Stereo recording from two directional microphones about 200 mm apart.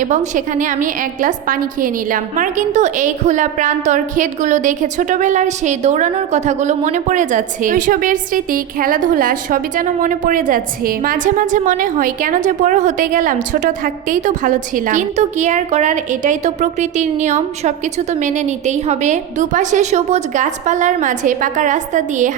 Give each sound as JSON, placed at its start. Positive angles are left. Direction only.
{"t": 0.0, "sound": "a woman's voice", "side_deg": -40}